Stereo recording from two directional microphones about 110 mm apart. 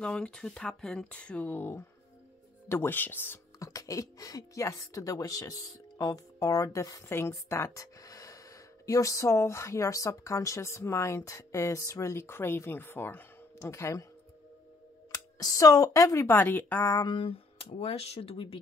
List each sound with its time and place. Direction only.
0.0 s speech: 10° left (ahead or behind)
3.5 s speech: 30° left (ahead or behind)
15.0 s speech: 35° left (ahead or behind); by 16.8 s 20° left (ahead or behind)
16.8 s a sound: 35° left (ahead or behind)
17.1 s speech: 55° left (ahead or behind)